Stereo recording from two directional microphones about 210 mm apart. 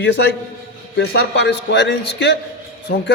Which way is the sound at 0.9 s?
55° left (ahead or behind).